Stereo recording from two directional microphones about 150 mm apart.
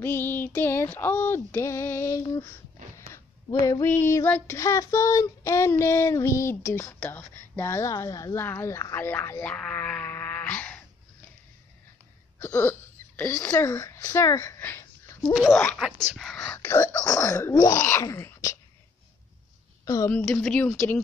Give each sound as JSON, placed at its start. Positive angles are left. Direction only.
{"t": 0.0, "sound": "child singing", "side_deg": 15}
{"t": 3.8, "sound": "child singing", "side_deg": 15}
{"t": 12.4, "sound": "speech", "side_deg": 15}
{"t": 15.3, "sound": "speech", "side_deg": 0}
{"t": 16.5, "sound": "wail", "side_deg": 15}
{"t": 19.8, "sound": "a woman's voice", "side_deg": 20}
{"t": 20.1, "sound": "child singing", "side_deg": 10}